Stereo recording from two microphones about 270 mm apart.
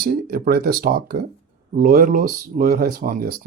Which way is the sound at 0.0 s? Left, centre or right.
Right.